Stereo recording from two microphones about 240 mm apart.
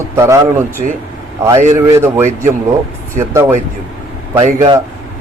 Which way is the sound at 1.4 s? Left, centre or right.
Centre.